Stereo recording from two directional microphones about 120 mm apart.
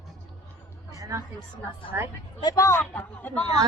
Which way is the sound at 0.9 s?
25° right (ahead or behind).